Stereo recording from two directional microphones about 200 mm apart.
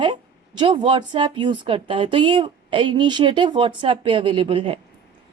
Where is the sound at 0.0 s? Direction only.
25° right (ahead or behind).